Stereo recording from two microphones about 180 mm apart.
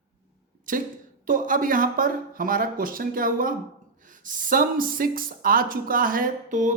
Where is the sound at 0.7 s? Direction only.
50° right (ahead or behind).